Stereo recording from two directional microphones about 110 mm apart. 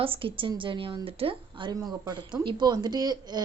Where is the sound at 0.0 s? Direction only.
55° right (ahead or behind).